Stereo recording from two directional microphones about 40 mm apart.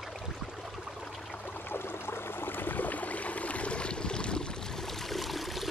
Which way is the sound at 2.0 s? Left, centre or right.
Left.